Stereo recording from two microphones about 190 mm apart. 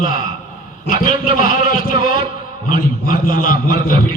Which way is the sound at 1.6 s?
25° right (ahead or behind).